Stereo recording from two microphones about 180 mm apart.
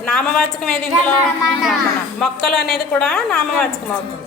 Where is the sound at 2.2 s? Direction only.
Centre (ahead or behind).